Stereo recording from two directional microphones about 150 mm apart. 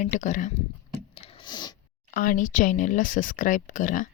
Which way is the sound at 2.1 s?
65° left (ahead or behind).